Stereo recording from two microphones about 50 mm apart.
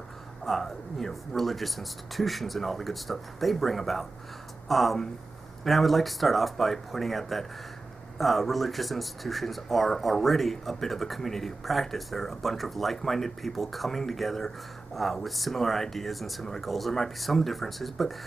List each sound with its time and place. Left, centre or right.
0.5 s speech: centre